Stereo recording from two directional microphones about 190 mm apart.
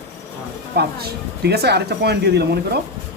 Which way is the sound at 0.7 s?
55° right (ahead or behind).